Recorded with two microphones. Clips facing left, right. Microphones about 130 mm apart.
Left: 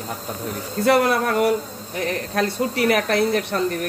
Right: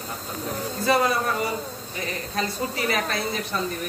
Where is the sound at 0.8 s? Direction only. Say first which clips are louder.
Left 5 dB; 70° left (ahead or behind).